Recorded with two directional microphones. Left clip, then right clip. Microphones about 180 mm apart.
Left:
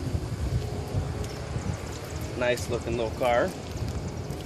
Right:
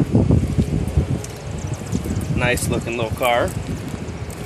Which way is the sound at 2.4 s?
30° right (ahead or behind).